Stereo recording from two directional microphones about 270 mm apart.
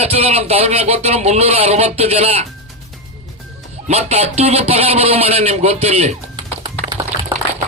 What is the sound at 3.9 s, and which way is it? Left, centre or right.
A man's voice, right.